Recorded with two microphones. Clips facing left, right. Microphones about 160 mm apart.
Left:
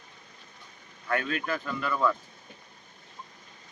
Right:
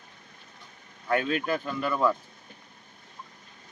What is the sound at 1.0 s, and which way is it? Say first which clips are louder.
Speech: right 3 dB; 25° right (ahead or behind).